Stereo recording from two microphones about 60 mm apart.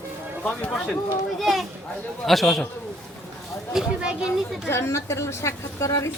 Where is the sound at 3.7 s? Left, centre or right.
Centre.